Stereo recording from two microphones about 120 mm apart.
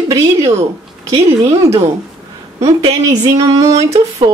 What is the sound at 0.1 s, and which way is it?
Speech, 25° right (ahead or behind).